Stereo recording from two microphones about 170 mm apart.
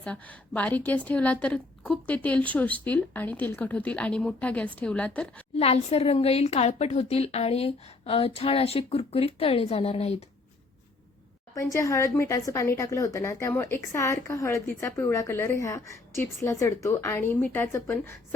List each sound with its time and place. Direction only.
0.0 s a woman's voice: 10° left (ahead or behind)
5.5 s a woman's voice: 35° left (ahead or behind)
11.5 s a woman's voice: 20° left (ahead or behind)